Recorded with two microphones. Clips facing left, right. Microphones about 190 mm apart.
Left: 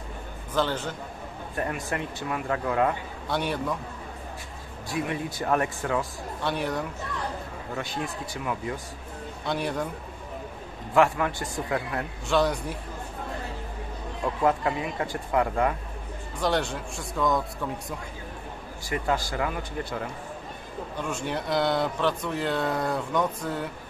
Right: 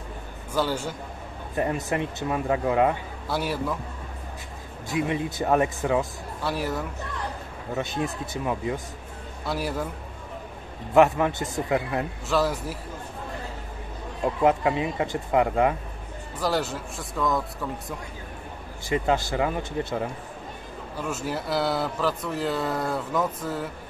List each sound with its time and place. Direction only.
0.5 s a man's voice: 10° right (ahead or behind)
1.5 s speech: 20° right (ahead or behind)
3.3 s speech: 5° right (ahead or behind)
4.8 s speech: 20° right (ahead or behind)
6.4 s speech: 5° right (ahead or behind)
7.7 s speech: 20° right (ahead or behind)
9.5 s speech: 5° right (ahead or behind)
11.0 s speech: 20° right (ahead or behind)
12.3 s speech: 5° right (ahead or behind)
14.2 s speech: 20° right (ahead or behind)
16.3 s speech: 5° right (ahead or behind)
18.9 s speech: 20° right (ahead or behind)
21.0 s speech: 5° right (ahead or behind)